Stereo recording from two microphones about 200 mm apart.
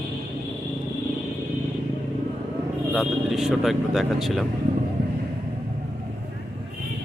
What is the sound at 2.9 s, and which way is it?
Speech, centre (ahead or behind).